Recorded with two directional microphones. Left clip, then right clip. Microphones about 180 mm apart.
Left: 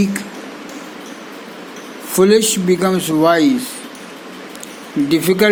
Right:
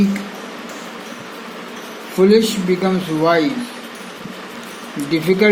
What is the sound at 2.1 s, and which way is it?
Speech, 55° left (ahead or behind).